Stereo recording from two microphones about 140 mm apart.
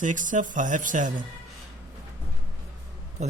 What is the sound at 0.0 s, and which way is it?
A man's voice, 70° right (ahead or behind).